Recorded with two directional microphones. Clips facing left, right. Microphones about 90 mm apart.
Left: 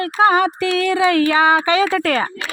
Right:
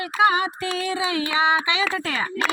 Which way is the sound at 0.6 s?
65° left (ahead or behind).